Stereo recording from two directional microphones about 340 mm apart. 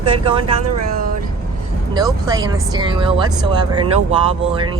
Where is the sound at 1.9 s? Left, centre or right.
Centre.